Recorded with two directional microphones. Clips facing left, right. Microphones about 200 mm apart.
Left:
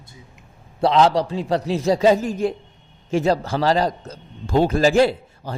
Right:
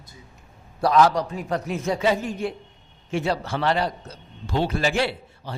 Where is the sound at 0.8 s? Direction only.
25° left (ahead or behind).